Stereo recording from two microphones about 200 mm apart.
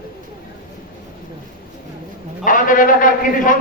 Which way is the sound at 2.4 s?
40° left (ahead or behind).